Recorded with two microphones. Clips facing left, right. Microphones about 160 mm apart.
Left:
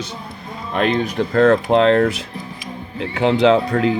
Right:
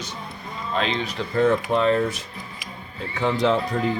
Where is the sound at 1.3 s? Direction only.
90° left.